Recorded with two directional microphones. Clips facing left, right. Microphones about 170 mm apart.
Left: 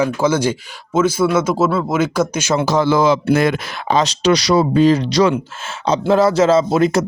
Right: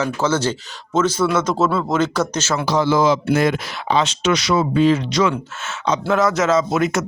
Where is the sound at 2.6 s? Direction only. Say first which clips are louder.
Left 2 dB; 50° left (ahead or behind).